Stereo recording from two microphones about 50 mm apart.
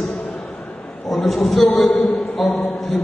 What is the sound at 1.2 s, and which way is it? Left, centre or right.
A man's voice, centre.